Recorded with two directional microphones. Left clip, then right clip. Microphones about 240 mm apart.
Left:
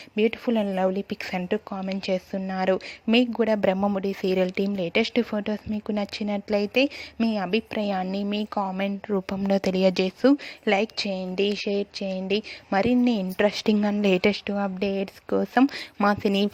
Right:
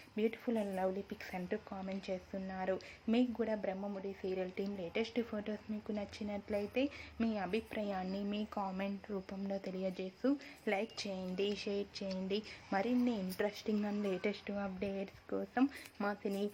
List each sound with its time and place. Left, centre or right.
0.2 s speech: left